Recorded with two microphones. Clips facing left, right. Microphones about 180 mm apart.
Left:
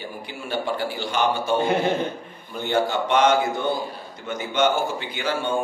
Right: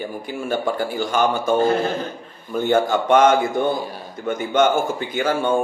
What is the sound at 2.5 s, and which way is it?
A man's voice, 50° right (ahead or behind).